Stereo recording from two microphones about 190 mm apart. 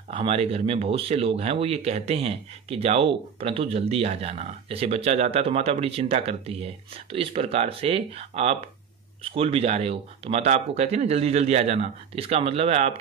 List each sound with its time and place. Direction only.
0.1 s speech: 30° right (ahead or behind)